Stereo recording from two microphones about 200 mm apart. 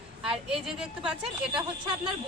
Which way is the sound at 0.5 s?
Centre (ahead or behind).